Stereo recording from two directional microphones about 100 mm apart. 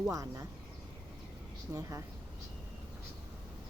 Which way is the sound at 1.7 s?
30° right (ahead or behind).